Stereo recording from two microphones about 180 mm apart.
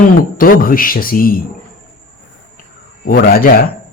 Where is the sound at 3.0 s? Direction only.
55° left (ahead or behind).